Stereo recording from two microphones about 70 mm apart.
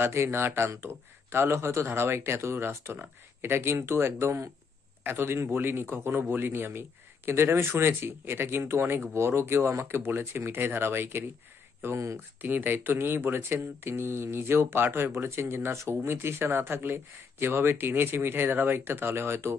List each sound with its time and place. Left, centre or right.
0.0 s speech: right
12.4 s speech: right